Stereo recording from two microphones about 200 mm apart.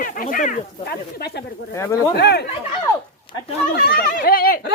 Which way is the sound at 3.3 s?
25° left (ahead or behind).